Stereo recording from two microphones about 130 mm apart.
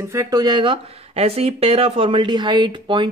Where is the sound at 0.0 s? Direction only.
20° right (ahead or behind).